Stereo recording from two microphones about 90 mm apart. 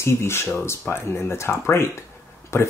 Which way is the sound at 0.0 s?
30° left (ahead or behind).